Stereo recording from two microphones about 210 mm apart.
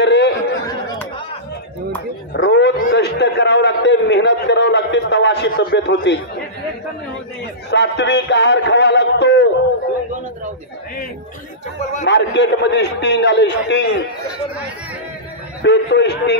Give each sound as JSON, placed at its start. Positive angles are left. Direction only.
{"t": 0.0, "sound": "chatter", "side_deg": 55}
{"t": 0.7, "sound": "chatter", "side_deg": 20}
{"t": 2.3, "sound": "a sound", "side_deg": 60}
{"t": 7.7, "sound": "music", "side_deg": 55}
{"t": 11.8, "sound": "a man's voice", "side_deg": 35}
{"t": 12.1, "sound": "music", "side_deg": 55}
{"t": 15.6, "sound": "music", "side_deg": 55}